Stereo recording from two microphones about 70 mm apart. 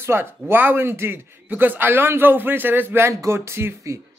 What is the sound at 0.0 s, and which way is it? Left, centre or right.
A man's voice, right.